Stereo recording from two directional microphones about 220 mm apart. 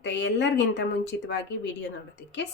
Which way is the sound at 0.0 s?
55° left (ahead or behind).